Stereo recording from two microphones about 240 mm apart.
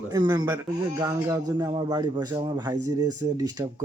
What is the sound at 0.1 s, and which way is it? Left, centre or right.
Speech, centre.